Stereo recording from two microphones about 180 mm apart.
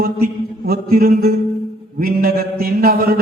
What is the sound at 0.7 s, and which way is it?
A man's voice, 55° right (ahead or behind).